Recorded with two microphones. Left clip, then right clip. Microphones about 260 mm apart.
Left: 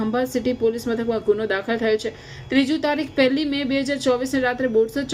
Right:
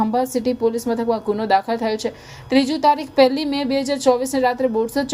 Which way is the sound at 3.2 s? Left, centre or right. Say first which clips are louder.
Right 4 dB; right.